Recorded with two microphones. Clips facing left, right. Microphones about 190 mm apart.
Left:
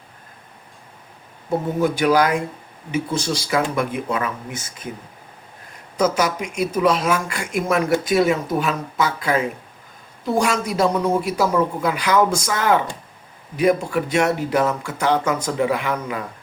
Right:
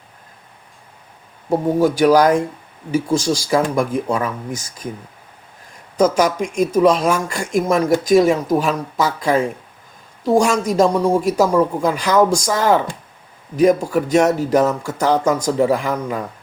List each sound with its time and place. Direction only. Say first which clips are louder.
1.5 s speech: right 4 dB; 40° right (ahead or behind)
6.0 s speech: right 4 dB; 45° right (ahead or behind)